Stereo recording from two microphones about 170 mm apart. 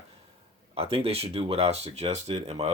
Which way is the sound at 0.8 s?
35° right (ahead or behind).